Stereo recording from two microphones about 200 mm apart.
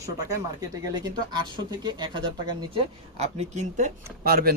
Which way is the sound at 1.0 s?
20° right (ahead or behind).